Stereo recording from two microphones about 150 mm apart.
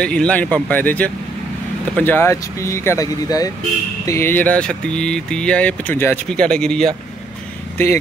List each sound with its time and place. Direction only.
0.0 s speech: 5° left (ahead or behind)
7.7 s speech: 15° left (ahead or behind)